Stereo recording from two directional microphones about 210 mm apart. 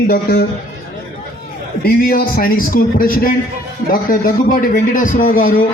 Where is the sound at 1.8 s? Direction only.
45° left (ahead or behind).